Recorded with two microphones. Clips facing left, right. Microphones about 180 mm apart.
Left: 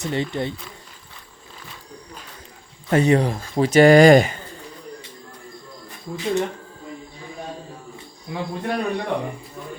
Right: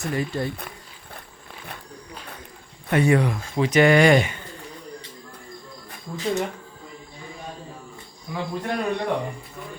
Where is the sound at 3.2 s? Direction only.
35° left (ahead or behind).